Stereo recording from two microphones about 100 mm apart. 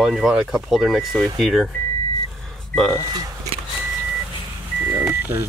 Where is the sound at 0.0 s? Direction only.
5° right (ahead or behind).